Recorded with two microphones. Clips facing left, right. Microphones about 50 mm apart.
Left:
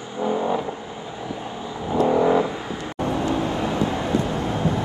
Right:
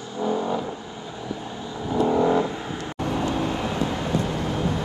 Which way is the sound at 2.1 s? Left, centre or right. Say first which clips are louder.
Left 2 dB; centre.